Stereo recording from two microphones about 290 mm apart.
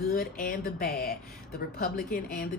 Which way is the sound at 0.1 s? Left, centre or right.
Left.